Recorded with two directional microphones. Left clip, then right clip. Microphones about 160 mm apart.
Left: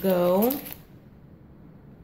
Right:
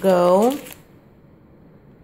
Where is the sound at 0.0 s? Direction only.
35° right (ahead or behind).